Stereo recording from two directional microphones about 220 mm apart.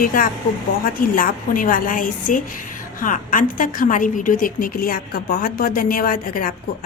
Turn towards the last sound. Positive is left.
turn(degrees=40)  # may be behind; listen again after turning